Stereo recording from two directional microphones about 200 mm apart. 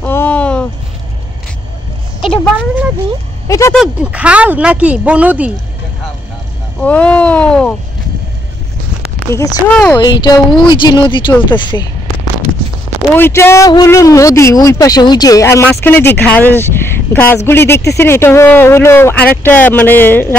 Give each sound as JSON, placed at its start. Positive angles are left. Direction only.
{"t": 0.0, "sound": "a sound", "side_deg": 10}
{"t": 2.2, "sound": "a sound", "side_deg": 5}
{"t": 3.4, "sound": "speech", "side_deg": 15}
{"t": 3.7, "sound": "speech", "side_deg": -5}
{"t": 6.8, "sound": "speech", "side_deg": 5}
{"t": 9.3, "sound": "speech", "side_deg": 10}
{"t": 9.9, "sound": "speech", "side_deg": 20}
{"t": 13.1, "sound": "speech", "side_deg": 10}